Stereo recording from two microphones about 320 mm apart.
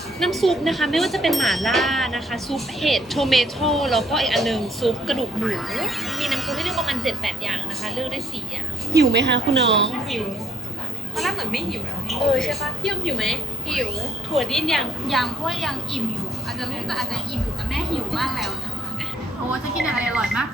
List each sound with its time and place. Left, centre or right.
0.2 s speech: centre
9.1 s a woman's voice: right
9.7 s speech: centre
11.2 s speech: centre
19.7 s speech: centre